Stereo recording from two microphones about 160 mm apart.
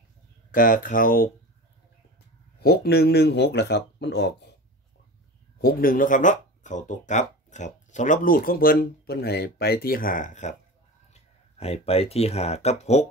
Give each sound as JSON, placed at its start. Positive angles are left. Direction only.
{"t": 0.5, "sound": "speech", "side_deg": 60}
{"t": 2.6, "sound": "speech", "side_deg": 80}
{"t": 5.6, "sound": "speech", "side_deg": 65}
{"t": 11.1, "sound": "speech", "side_deg": 40}